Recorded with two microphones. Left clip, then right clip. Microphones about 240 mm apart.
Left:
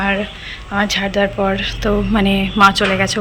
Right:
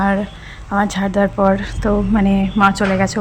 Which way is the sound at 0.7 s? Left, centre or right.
Right.